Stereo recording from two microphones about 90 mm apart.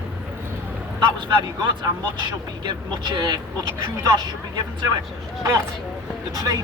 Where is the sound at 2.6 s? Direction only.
50° right (ahead or behind).